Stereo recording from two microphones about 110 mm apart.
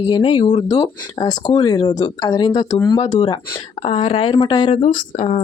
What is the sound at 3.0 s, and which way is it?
Speech, 80° left.